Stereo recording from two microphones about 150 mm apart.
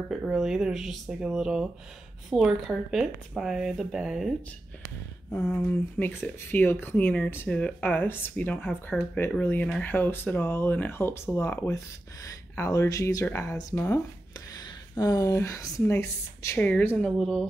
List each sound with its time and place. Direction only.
0.1 s speech: 5° right (ahead or behind)
5.4 s speech: 10° left (ahead or behind)